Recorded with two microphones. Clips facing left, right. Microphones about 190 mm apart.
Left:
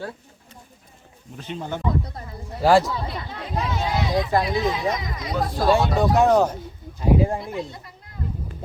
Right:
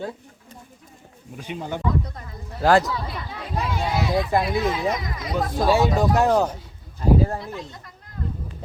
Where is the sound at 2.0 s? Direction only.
30° left (ahead or behind).